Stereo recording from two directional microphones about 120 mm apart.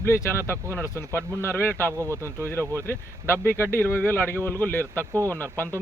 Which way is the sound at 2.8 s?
20° left (ahead or behind).